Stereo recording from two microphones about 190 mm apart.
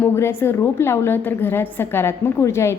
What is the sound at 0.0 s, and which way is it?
A woman's voice, 10° left (ahead or behind).